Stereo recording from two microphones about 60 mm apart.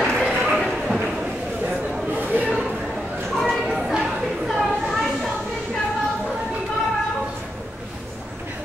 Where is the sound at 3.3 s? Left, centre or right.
Centre.